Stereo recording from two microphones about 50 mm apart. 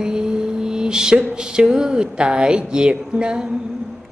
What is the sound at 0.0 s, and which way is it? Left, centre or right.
Mantra, centre.